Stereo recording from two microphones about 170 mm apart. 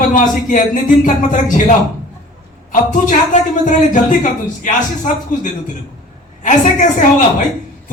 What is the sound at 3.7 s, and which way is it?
A man's voice, 50° left (ahead or behind).